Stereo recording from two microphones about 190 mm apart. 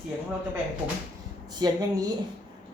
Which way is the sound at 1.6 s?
20° right (ahead or behind).